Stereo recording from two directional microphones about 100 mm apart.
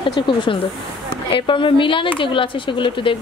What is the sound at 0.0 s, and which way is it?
Speech, 60° left (ahead or behind).